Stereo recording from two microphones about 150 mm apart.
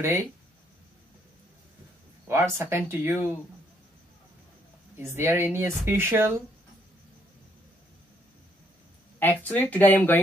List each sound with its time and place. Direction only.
0.0 s speech: 15° right (ahead or behind)
2.2 s speech: 15° right (ahead or behind)
4.9 s speech: 15° right (ahead or behind)
9.2 s speech: 10° left (ahead or behind)